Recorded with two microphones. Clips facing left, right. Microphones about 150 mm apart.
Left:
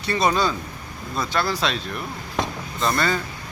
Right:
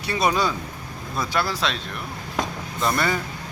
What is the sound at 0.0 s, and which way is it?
Speech, 10° right (ahead or behind).